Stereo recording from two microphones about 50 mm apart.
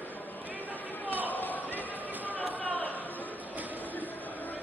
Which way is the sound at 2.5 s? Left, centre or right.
Left.